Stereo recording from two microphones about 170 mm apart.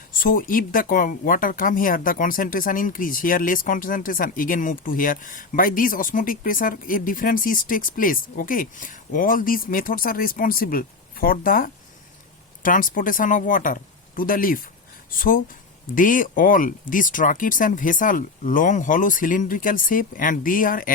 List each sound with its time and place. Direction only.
0.1 s speech: 55° left (ahead or behind)